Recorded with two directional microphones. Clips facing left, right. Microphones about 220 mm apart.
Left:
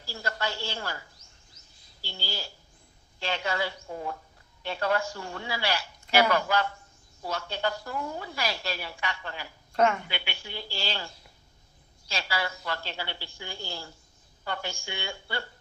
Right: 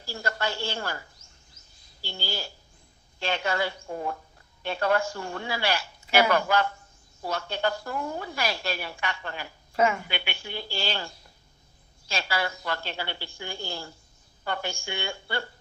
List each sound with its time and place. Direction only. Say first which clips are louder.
0.0 s a sound: right 2 dB; 50° right (ahead or behind)
2.0 s a woman's voice: right 3 dB; 50° right (ahead or behind)
9.7 s a woman's voice: even; 5° right (ahead or behind)
10.1 s a woman's voice: right 3 dB; 55° right (ahead or behind)